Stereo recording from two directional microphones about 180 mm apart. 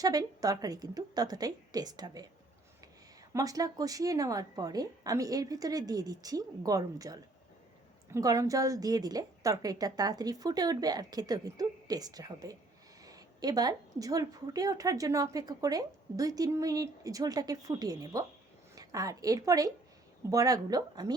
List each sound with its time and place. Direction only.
0.0 s a woman's voice: 20° right (ahead or behind)
3.3 s a woman's voice: 20° right (ahead or behind)